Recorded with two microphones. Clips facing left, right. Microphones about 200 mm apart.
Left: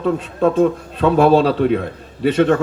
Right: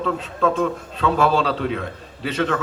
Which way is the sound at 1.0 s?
55° left (ahead or behind).